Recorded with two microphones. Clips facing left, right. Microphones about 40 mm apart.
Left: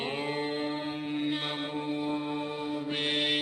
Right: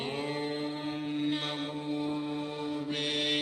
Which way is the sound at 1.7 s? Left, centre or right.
Left.